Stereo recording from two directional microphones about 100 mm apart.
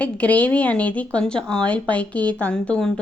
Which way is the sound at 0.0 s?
15° left (ahead or behind).